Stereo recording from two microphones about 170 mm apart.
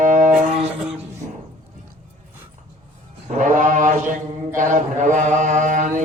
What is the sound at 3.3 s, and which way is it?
Mantra, 45° right (ahead or behind).